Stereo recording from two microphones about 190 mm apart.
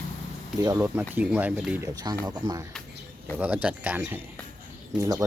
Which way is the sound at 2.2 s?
20° right (ahead or behind).